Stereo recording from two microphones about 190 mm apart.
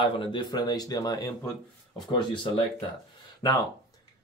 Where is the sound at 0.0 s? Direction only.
25° left (ahead or behind).